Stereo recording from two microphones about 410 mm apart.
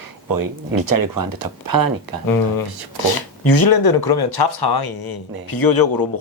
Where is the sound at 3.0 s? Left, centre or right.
Left.